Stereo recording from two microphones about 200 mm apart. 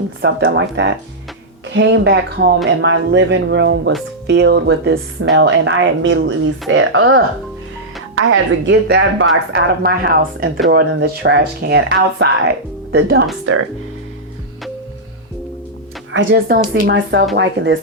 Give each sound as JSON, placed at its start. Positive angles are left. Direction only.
{"t": 0.2, "sound": "a woman's voice", "side_deg": -55}
{"t": 8.1, "sound": "a woman's voice", "side_deg": -75}
{"t": 13.4, "sound": "speech", "side_deg": -90}
{"t": 16.1, "sound": "a woman's voice", "side_deg": -65}